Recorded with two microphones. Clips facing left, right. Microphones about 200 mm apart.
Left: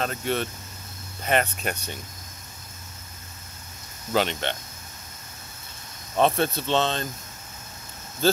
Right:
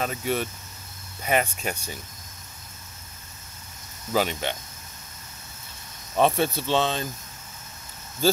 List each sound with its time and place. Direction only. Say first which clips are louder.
0.0 s speech: even; 5° right (ahead or behind)
4.1 s speech: even; 5° right (ahead or behind)
6.1 s speech: even; 10° right (ahead or behind)